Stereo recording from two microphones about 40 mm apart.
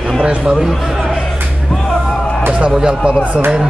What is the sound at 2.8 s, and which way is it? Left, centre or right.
Speech, right.